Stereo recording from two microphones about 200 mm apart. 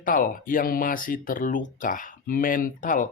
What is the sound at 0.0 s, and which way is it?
Speech, 45° left (ahead or behind).